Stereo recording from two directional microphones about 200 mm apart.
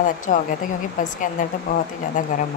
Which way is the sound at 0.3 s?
35° left (ahead or behind).